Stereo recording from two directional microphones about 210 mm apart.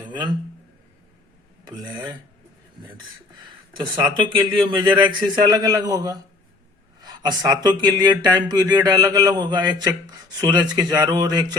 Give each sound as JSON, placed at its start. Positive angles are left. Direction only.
{"t": 0.0, "sound": "speech", "side_deg": -20}
{"t": 3.7, "sound": "a man's voice", "side_deg": -20}